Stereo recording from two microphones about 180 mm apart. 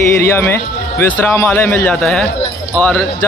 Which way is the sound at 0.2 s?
15° left (ahead or behind).